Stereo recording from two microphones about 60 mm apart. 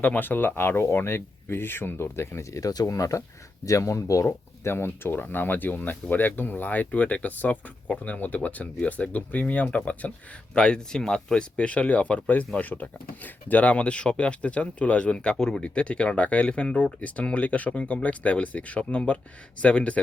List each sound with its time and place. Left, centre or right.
0.0 s speech: left
2.6 s speech: left
4.3 s speech: left